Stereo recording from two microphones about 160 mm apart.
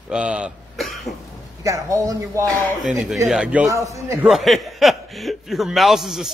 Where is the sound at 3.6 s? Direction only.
20° right (ahead or behind).